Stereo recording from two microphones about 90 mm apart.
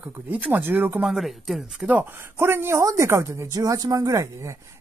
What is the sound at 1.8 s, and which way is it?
Speech, 20° right (ahead or behind).